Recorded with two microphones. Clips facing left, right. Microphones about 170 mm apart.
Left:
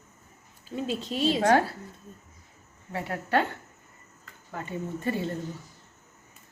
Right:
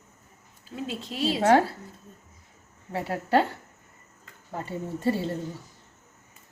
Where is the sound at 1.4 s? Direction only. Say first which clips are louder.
Right 3 dB; 25° right (ahead or behind).